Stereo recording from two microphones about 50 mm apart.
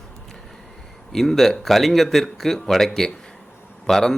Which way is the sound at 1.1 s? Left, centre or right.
Centre.